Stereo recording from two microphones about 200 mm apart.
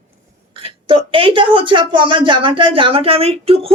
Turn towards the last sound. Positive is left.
turn(degrees=-30)  # may be behind; listen again after turning